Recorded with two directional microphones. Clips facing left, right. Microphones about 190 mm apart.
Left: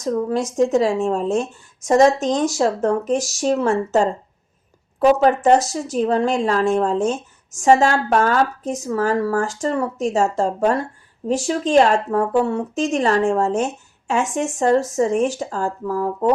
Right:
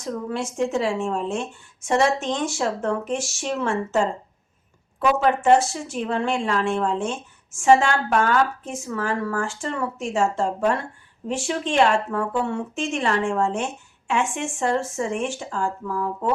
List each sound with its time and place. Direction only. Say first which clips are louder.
0.0 s a woman's voice: left 7 dB; 40° left (ahead or behind)